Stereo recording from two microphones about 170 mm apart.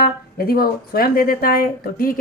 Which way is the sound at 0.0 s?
60° left (ahead or behind).